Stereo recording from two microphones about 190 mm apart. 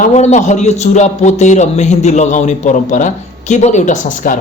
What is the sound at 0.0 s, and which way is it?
A man's voice, 35° left (ahead or behind).